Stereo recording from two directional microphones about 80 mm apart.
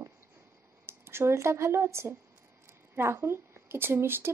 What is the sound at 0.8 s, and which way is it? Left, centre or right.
Speech, right.